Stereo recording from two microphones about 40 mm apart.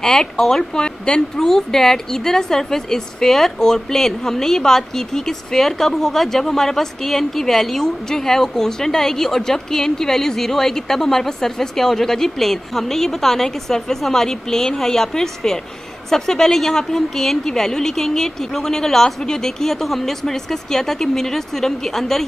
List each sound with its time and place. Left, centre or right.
0.0 s speech: centre